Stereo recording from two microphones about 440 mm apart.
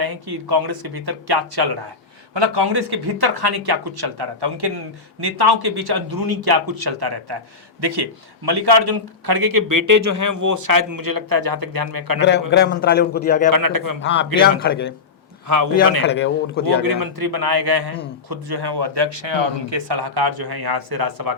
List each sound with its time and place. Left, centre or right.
0.0 s a man's voice: right
2.3 s a man's voice: right
12.2 s a man's voice: left
13.5 s a man's voice: right
14.6 s a man's voice: left
16.0 s a man's voice: left
17.0 s a man's voice: right